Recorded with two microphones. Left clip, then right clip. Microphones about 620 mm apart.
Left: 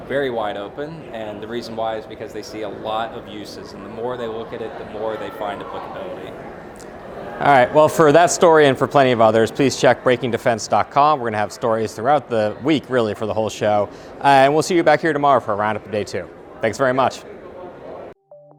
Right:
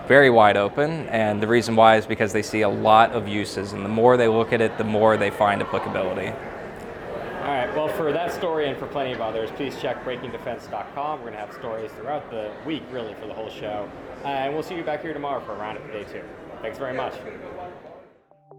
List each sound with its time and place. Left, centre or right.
0.1 s speech: right
7.4 s speech: left